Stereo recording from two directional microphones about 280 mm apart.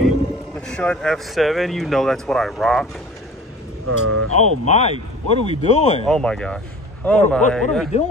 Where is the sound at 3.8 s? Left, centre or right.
Right.